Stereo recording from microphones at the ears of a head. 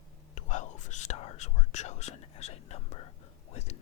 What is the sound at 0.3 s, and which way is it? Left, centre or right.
Whispering, left.